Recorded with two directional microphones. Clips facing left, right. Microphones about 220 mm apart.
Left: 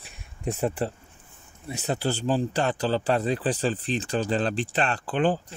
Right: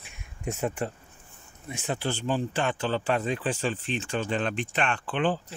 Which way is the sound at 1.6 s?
40° left (ahead or behind).